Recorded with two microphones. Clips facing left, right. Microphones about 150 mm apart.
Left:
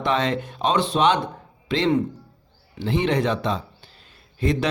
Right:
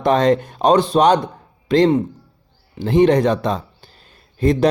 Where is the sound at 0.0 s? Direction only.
40° right (ahead or behind).